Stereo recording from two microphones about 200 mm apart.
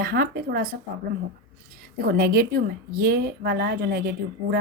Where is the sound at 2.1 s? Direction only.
45° right (ahead or behind).